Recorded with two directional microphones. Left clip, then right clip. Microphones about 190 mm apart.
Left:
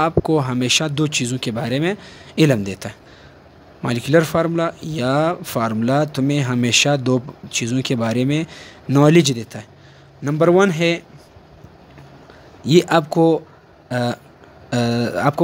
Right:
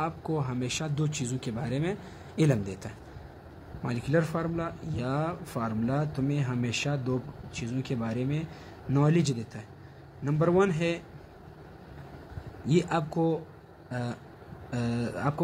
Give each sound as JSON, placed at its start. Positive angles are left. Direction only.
{"t": 0.0, "sound": "speech", "side_deg": 45}
{"t": 12.6, "sound": "speech", "side_deg": 45}